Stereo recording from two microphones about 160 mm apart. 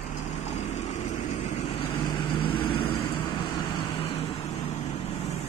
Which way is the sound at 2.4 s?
35° left (ahead or behind).